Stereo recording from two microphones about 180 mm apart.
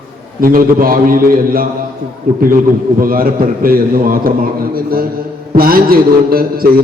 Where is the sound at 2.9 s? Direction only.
55° right (ahead or behind).